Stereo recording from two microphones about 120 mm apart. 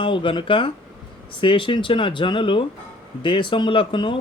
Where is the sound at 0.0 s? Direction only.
45° left (ahead or behind).